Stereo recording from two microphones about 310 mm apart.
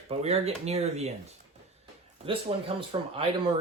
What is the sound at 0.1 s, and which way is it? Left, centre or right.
Speech, centre.